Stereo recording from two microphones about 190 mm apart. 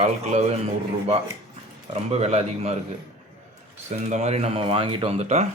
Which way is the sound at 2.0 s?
30° right (ahead or behind).